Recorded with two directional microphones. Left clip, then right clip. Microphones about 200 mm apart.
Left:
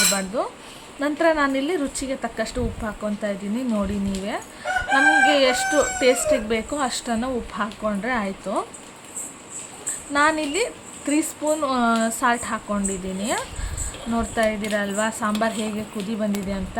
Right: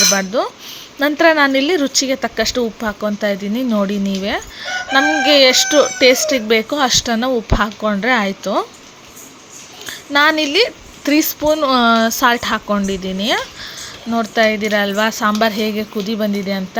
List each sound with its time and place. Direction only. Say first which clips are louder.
0.1 s speech: right 8 dB; 30° right (ahead or behind)
10.1 s speech: right 7 dB; 30° right (ahead or behind)